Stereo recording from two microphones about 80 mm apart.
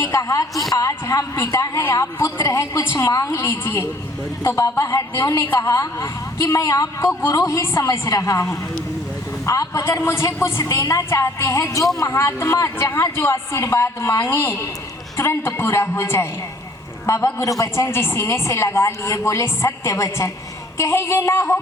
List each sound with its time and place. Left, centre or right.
0.0 s a woman's voice: left
1.8 s a woman's voice: left
7.9 s a woman's voice: left
10.0 s speech: left
17.6 s speech: left